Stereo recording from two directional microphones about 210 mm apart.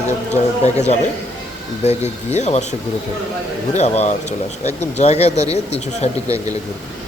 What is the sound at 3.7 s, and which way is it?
Speech, 30° left (ahead or behind).